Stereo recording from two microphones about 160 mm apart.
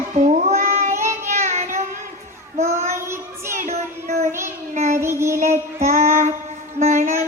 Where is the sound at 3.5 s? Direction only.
55° right (ahead or behind).